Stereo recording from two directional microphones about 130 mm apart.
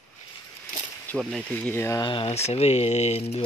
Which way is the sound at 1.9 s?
40° left (ahead or behind).